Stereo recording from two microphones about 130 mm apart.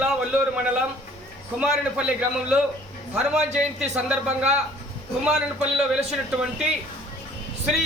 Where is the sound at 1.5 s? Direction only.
10° right (ahead or behind).